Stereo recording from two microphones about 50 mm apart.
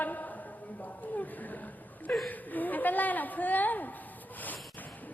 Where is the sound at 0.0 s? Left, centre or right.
Left.